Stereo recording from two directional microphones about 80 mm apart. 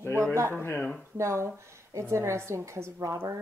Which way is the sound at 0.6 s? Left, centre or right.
Left.